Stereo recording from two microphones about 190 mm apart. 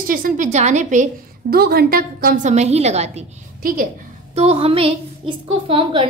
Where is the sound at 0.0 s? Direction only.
45° right (ahead or behind).